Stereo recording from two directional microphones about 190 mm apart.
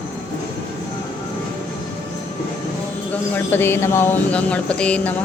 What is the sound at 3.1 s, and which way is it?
Speech, 10° left (ahead or behind).